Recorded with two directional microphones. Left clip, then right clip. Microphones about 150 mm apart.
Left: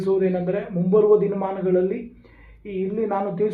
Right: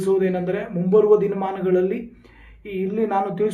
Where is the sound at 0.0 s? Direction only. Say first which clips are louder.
Right 1 dB; 25° right (ahead or behind).